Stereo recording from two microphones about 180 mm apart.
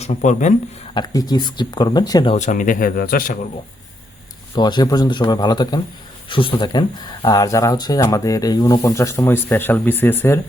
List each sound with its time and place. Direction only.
0.0 s speech: 40° left (ahead or behind)
0.9 s speech: 20° left (ahead or behind)
2.3 s speech: 40° left (ahead or behind)
4.5 s speech: 25° left (ahead or behind)